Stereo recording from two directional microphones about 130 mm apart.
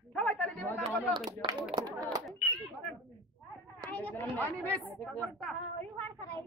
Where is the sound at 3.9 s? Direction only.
15° left (ahead or behind).